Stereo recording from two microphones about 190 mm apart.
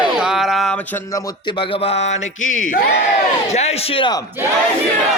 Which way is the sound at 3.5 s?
35° left (ahead or behind).